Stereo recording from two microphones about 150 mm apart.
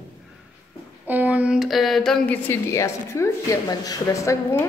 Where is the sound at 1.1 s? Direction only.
10° right (ahead or behind).